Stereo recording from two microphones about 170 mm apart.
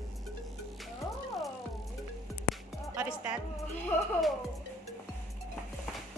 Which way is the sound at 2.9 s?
10° right (ahead or behind).